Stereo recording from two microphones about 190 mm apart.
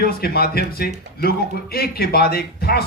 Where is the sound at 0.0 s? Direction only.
55° left (ahead or behind).